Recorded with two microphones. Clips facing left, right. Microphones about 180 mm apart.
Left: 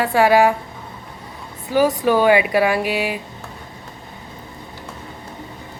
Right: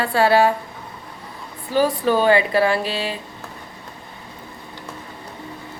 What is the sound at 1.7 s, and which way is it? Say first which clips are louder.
A woman's voice: left 2 dB; 15° left (ahead or behind).